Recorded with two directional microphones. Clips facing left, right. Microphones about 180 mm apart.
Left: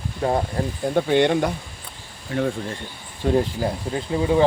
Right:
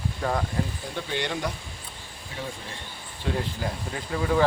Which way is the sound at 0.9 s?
55° left (ahead or behind).